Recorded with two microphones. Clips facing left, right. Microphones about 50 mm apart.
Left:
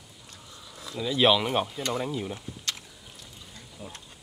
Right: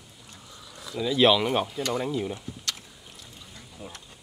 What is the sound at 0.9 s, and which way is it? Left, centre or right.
Speech, centre.